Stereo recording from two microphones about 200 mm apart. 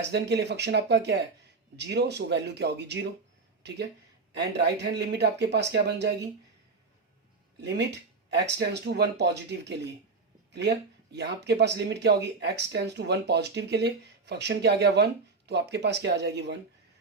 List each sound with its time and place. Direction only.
0.1 s speech: 55° right (ahead or behind)
4.4 s speech: 60° right (ahead or behind)
7.6 s speech: 60° right (ahead or behind)